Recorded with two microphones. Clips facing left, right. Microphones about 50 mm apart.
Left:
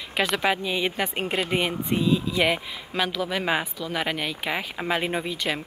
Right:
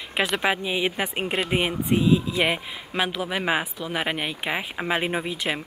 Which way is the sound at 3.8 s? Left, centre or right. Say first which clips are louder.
Right 1 dB; centre.